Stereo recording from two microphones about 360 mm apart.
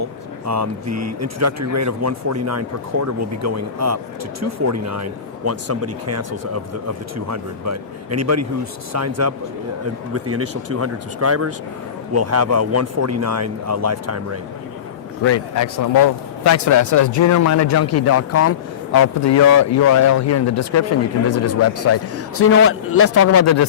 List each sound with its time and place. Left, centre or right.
0.0 s speech: right
15.2 s a man's voice: left